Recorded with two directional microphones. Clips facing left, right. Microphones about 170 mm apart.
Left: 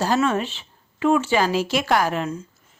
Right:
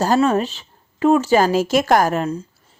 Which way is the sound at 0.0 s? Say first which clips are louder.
Right 4 dB; 40° right (ahead or behind).